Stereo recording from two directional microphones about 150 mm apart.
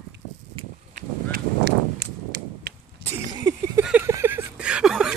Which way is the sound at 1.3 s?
90° right.